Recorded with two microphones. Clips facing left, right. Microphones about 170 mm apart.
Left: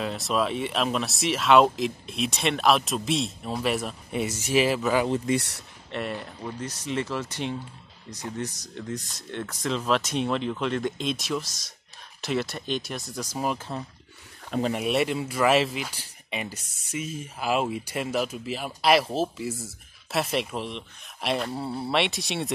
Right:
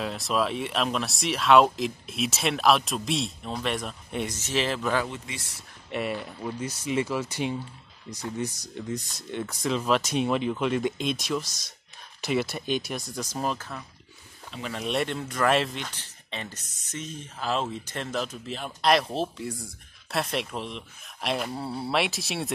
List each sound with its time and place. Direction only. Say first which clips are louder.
0.0 s speech: left 1 dB; centre (ahead or behind)
5.2 s speech: left 15 dB; 65° left (ahead or behind)
5.9 s speech: right 2 dB; 5° right (ahead or behind)
13.6 s speech: left 5 dB; 25° left (ahead or behind)
14.7 s speech: left 1 dB; 5° left (ahead or behind)